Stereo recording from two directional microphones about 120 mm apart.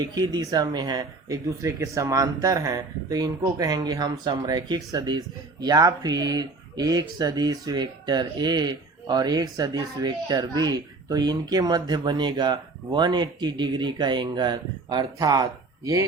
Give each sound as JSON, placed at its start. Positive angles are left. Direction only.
{"t": 0.0, "sound": "speech", "side_deg": -35}